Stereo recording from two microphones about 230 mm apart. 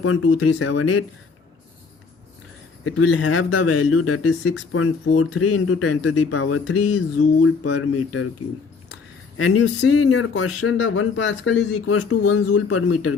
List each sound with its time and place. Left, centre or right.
0.0 s speech: left
2.8 s speech: left
9.4 s speech: left
11.9 s speech: left